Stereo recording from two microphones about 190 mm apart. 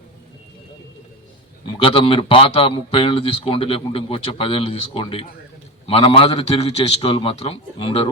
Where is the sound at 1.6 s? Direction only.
25° left (ahead or behind).